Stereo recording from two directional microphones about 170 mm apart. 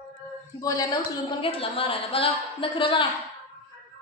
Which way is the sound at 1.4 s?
30° left (ahead or behind).